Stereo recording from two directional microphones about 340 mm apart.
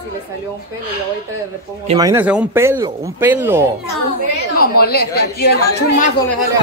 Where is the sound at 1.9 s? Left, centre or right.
Centre.